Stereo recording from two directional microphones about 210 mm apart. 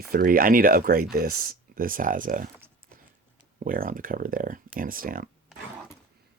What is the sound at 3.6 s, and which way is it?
Speech, 40° right (ahead or behind).